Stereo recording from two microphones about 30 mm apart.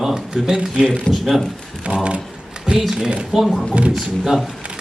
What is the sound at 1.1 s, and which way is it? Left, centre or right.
Speech, left.